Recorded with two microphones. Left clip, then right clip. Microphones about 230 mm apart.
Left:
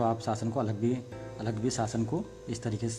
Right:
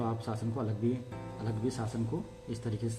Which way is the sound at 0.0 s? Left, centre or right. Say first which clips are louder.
Left 7 dB; left.